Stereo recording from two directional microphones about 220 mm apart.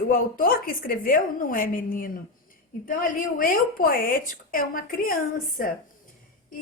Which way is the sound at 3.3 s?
40° left (ahead or behind).